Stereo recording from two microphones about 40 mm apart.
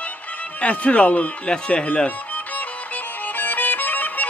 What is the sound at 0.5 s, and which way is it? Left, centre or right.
Speech, left.